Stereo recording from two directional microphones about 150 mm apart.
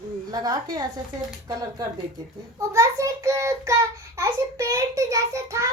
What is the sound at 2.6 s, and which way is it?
A child's voice, 20° right (ahead or behind).